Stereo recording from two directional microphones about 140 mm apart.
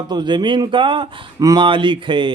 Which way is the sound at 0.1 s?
30° right (ahead or behind).